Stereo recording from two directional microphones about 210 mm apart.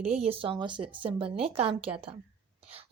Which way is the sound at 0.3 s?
25° right (ahead or behind).